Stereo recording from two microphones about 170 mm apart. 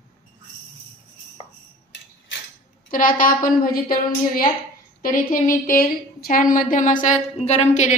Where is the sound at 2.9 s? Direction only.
55° left (ahead or behind).